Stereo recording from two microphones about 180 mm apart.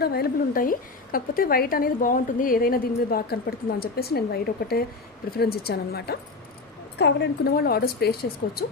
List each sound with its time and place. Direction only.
0.0 s a woman's voice: 60° left (ahead or behind)